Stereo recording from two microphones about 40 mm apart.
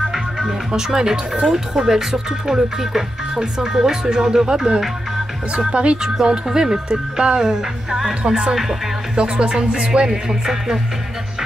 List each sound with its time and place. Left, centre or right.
0.4 s speech: centre
5.6 s music: right
6.2 s speech: centre
9.1 s music: right
10.0 s speech: centre